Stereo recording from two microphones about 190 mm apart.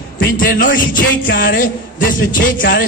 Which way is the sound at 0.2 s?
50° left (ahead or behind).